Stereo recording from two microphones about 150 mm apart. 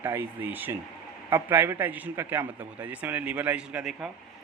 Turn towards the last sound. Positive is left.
turn(degrees=-5)  # may be behind; listen again after turning